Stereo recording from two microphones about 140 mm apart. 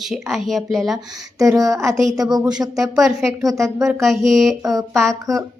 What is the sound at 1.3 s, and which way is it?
Speech, 25° right (ahead or behind).